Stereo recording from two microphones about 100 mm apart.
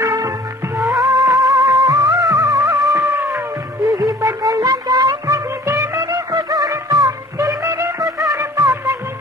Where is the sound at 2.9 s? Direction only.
30° right (ahead or behind).